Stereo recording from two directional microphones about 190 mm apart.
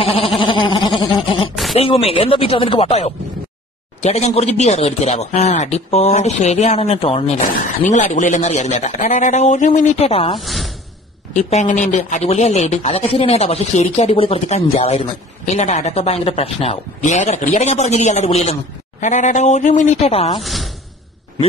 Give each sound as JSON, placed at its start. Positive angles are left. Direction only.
{"t": 0.0, "sound": "sheep", "side_deg": 30}
{"t": 0.4, "sound": "goat", "side_deg": 25}
{"t": 1.8, "sound": "speech", "side_deg": 30}
{"t": 10.4, "sound": "a sound", "side_deg": 0}
{"t": 11.3, "sound": "speech", "side_deg": 40}
{"t": 20.3, "sound": "a sound", "side_deg": 0}